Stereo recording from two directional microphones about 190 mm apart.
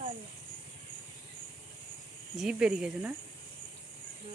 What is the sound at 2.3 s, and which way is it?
Speech, 5° right (ahead or behind).